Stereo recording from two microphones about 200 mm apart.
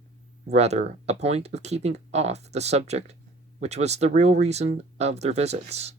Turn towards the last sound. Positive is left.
turn(degrees=-35)  # may be behind; listen again after turning